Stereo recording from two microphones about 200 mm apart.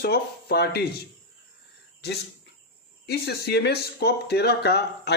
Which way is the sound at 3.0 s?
55° left (ahead or behind).